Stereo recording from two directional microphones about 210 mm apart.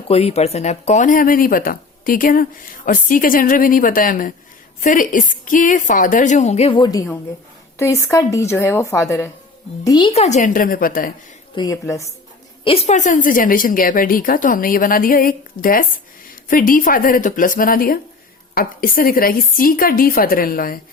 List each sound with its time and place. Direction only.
0.1 s a woman's voice: 30° left (ahead or behind)
11.5 s a woman's voice: 15° left (ahead or behind)
12.6 s a woman's voice: 30° left (ahead or behind)